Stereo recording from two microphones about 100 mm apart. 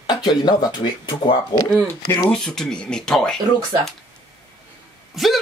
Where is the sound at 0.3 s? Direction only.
45° left (ahead or behind).